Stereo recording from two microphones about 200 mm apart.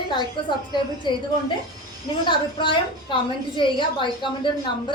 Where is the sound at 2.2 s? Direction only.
25° left (ahead or behind).